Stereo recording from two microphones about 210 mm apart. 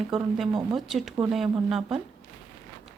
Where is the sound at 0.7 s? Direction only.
Centre (ahead or behind).